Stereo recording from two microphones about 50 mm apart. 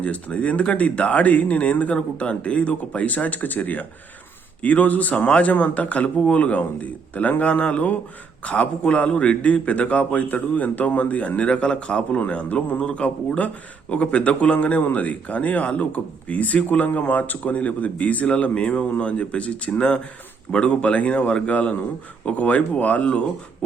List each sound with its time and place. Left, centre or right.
0.0 s a man's voice: left